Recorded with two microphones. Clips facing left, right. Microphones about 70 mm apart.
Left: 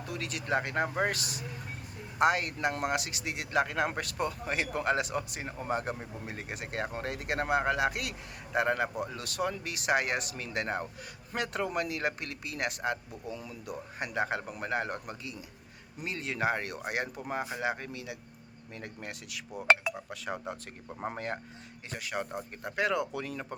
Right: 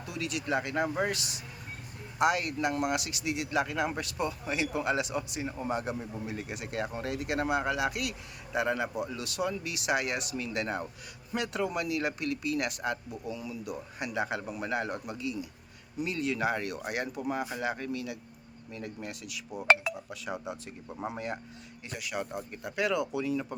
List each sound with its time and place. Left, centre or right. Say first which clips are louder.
0.1 s speech: even; left
18.7 s speech: right 3 dB; left
23.2 s speech: right 6 dB; left